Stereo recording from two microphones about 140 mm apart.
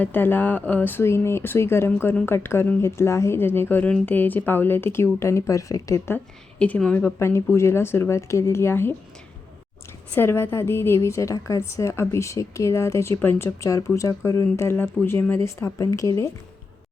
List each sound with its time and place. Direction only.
0.0 s speech: 15° left (ahead or behind)
10.2 s a woman's voice: 15° left (ahead or behind)